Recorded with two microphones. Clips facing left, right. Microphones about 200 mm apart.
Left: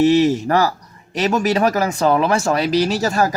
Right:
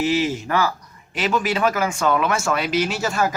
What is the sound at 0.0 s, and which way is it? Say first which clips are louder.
Speech: left 7 dB; 40° left (ahead or behind).